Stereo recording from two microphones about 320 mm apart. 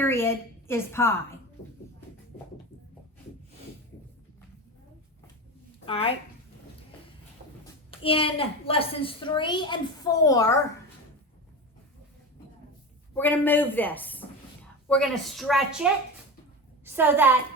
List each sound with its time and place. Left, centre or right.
0.0 s a woman's voice: centre
5.8 s speech: centre
7.9 s a woman's voice: centre
13.1 s a woman's voice: centre